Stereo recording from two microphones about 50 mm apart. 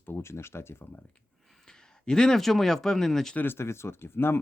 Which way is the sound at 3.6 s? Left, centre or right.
Left.